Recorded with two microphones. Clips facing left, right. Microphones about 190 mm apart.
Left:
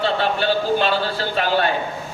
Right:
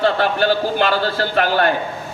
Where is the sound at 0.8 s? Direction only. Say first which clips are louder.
Right 3 dB; 50° right (ahead or behind).